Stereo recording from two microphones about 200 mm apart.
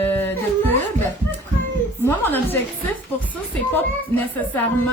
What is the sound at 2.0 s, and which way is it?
A woman's voice, 10° left (ahead or behind).